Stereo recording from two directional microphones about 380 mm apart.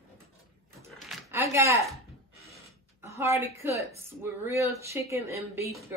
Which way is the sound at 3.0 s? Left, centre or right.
Centre.